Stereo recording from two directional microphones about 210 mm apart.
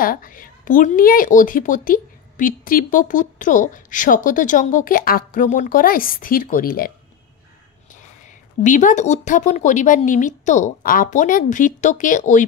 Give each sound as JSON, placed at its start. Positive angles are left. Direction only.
{"t": 0.0, "sound": "a woman's voice", "side_deg": 40}
{"t": 8.6, "sound": "a woman's voice", "side_deg": 35}